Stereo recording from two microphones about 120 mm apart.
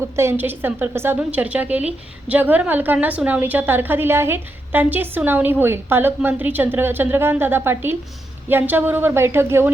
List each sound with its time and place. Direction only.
0.2 s a woman's voice: 20° right (ahead or behind)